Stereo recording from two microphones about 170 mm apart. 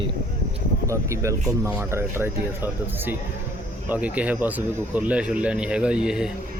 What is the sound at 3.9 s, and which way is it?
Speech, 10° right (ahead or behind).